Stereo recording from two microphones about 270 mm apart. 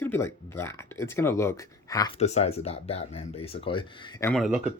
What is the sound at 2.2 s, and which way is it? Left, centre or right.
Speech, left.